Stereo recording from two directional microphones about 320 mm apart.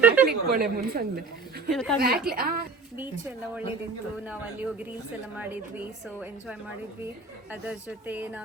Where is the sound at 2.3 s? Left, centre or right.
Right.